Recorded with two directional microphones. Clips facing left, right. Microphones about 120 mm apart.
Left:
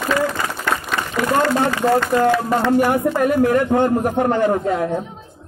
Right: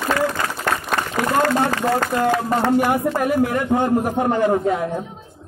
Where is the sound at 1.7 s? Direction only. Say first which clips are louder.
Left 3 dB; 45° right (ahead or behind).